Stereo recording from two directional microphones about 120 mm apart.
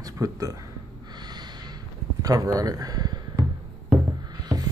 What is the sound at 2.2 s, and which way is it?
Speech, 30° right (ahead or behind).